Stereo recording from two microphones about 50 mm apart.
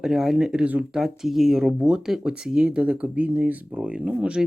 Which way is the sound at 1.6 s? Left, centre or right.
Centre.